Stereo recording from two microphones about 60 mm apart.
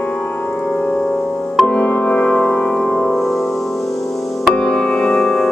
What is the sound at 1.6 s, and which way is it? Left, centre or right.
Music, left.